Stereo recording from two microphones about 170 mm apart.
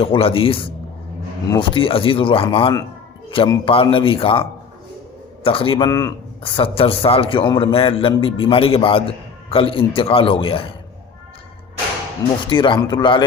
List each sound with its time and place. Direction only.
0.0 s a man's voice: 30° left (ahead or behind)
6.4 s a man's voice: 30° left (ahead or behind)
12.5 s speech: 30° left (ahead or behind)